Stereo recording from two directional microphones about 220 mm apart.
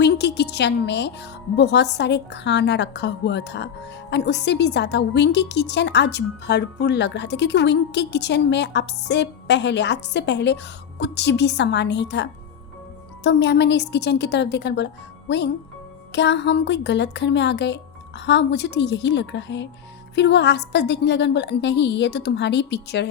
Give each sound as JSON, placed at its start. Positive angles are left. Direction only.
{"t": 0.0, "sound": "a woman's voice", "side_deg": 50}
{"t": 16.1, "sound": "a woman's voice", "side_deg": 50}